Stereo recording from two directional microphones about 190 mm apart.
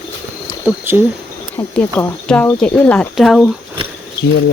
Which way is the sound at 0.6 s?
10° right (ahead or behind).